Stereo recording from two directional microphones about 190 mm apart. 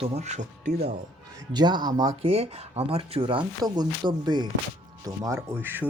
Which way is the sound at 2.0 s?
30° right (ahead or behind).